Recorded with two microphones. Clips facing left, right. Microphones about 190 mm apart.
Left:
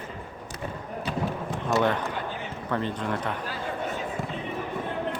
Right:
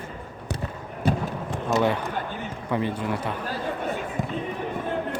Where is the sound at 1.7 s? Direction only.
10° right (ahead or behind).